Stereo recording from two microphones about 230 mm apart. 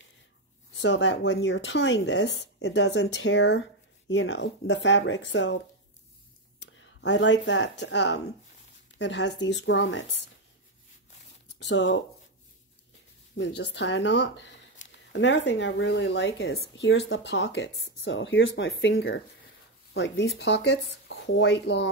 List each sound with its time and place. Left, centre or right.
0.7 s speech: left
6.6 s speech: left
11.6 s speech: left
13.4 s speech: left